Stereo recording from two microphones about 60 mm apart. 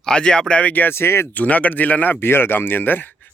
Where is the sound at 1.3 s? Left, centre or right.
Left.